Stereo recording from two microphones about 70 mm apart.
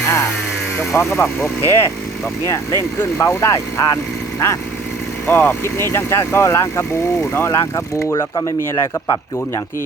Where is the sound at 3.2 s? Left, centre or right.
Left.